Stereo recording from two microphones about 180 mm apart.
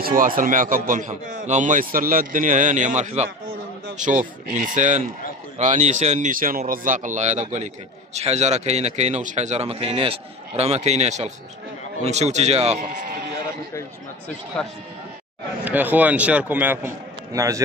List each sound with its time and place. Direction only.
0.4 s a man's voice: 50° right (ahead or behind)
12.8 s a man's voice: 50° right (ahead or behind)
15.6 s a man's voice: 10° right (ahead or behind)